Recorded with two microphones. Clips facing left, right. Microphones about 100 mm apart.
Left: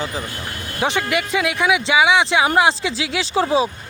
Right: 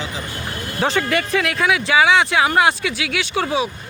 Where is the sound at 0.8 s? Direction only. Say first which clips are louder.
Right 1 dB; 15° left (ahead or behind); by 3.7 s 30° left (ahead or behind).